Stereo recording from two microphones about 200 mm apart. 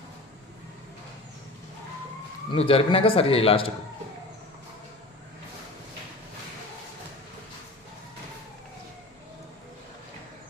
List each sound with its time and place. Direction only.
2.5 s a man's voice: 30° left (ahead or behind)